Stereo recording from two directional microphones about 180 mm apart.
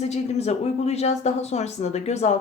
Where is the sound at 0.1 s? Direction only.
35° left (ahead or behind).